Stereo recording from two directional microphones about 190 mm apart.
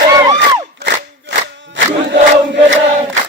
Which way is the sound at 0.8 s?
55° right (ahead or behind).